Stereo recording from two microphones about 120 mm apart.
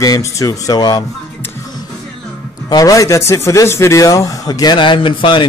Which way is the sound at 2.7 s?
30° left (ahead or behind).